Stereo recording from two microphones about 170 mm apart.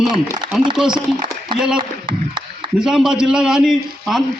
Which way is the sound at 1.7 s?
30° right (ahead or behind).